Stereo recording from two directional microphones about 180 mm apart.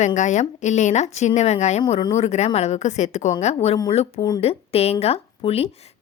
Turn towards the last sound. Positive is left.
turn(degrees=35)  # may be behind; listen again after turning